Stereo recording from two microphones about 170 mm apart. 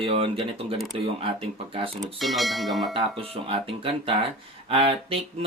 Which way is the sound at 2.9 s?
30° right (ahead or behind).